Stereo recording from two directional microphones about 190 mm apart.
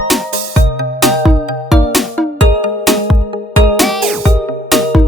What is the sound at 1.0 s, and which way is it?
Music, centre (ahead or behind).